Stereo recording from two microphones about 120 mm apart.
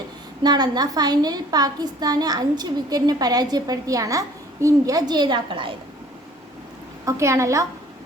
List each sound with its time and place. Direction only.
0.4 s a woman's voice: 35° right (ahead or behind)
7.0 s a woman's voice: 25° right (ahead or behind)